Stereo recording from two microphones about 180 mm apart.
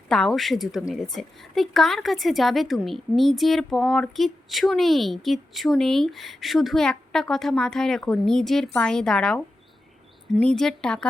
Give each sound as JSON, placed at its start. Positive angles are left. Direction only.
{"t": 0.1, "sound": "a woman's voice", "side_deg": 5}
{"t": 10.4, "sound": "a woman's voice", "side_deg": 5}